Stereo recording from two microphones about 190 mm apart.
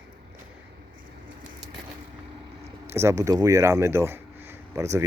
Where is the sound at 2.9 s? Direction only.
15° right (ahead or behind).